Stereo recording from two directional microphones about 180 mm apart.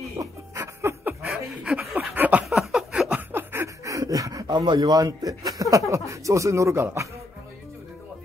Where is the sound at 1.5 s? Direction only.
Centre (ahead or behind).